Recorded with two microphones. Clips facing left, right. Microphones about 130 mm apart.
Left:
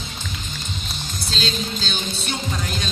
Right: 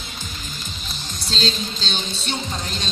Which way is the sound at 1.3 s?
35° right (ahead or behind).